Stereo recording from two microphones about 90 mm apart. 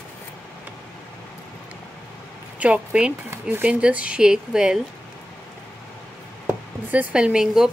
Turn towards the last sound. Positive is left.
turn(degrees=-5)  # may be behind; listen again after turning